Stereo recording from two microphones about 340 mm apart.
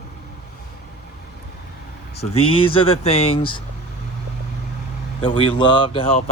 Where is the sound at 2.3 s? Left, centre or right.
Centre.